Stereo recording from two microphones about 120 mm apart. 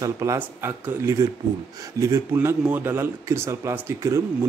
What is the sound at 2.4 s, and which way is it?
A man's voice, 15° right (ahead or behind).